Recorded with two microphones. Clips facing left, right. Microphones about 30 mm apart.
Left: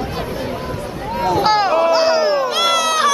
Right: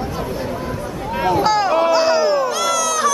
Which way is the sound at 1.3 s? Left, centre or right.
Left.